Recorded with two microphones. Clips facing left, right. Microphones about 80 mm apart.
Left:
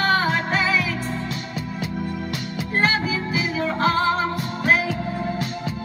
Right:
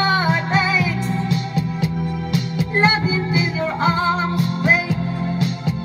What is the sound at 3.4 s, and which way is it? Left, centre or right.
Music, centre.